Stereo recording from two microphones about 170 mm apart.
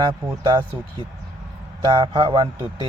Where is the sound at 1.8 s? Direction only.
30° right (ahead or behind).